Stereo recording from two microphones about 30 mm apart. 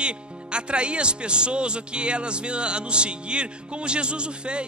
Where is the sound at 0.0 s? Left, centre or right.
Right.